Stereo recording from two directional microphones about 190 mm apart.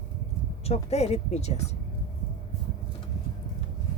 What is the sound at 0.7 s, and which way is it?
Speech, 35° left (ahead or behind).